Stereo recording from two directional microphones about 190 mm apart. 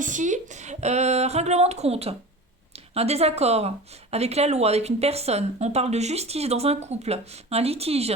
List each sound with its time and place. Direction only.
0.0 s speech: 40° right (ahead or behind)